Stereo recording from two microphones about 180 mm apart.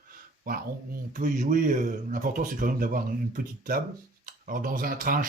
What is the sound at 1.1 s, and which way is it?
Speech, 45° right (ahead or behind).